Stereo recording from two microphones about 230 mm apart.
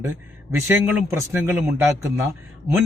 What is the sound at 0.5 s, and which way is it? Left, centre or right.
Speech, centre.